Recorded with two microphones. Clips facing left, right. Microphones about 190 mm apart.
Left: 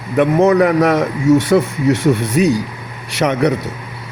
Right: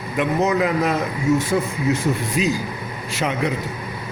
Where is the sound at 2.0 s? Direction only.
70° left (ahead or behind).